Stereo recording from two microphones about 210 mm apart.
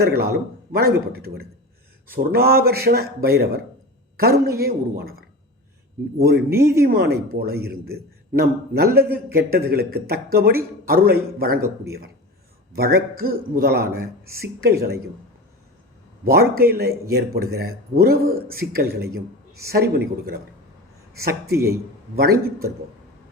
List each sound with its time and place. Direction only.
0.0 s a man's voice: 50° right (ahead or behind)
6.1 s a man's voice: 50° right (ahead or behind)
6.5 s speech: 15° right (ahead or behind)
6.7 s a man's voice: 45° right (ahead or behind)
16.2 s a man's voice: 50° right (ahead or behind)